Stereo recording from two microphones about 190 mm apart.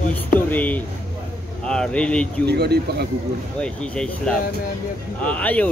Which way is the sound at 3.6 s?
5° left (ahead or behind).